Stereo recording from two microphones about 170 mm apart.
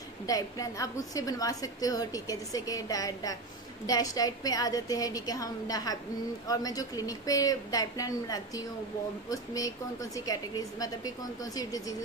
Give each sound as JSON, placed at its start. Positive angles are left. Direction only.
{"t": 0.3, "sound": "a woman's voice", "side_deg": 20}